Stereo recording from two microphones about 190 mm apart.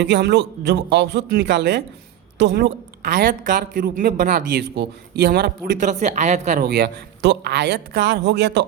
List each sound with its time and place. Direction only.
0.0 s a man's voice: 65° right (ahead or behind)
3.2 s speech: 45° right (ahead or behind)
5.8 s speech: 40° right (ahead or behind)
6.6 s a man's voice: 60° right (ahead or behind)